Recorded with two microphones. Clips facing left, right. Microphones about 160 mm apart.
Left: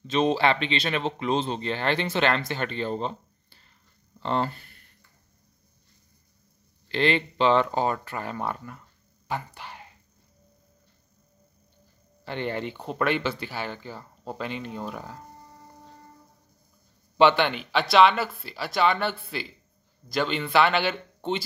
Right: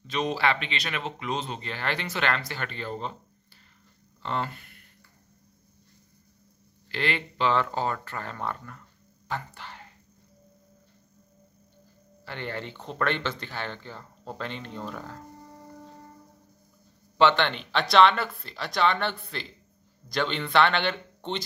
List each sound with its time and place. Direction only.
0.0 s speech: 25° left (ahead or behind)
4.2 s speech: 30° left (ahead or behind)
6.9 s speech: 25° left (ahead or behind)
12.3 s speech: 20° left (ahead or behind)
17.2 s speech: 10° left (ahead or behind)